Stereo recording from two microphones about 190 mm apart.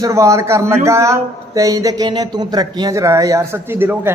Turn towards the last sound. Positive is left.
turn(degrees=-10)  # may be behind; listen again after turning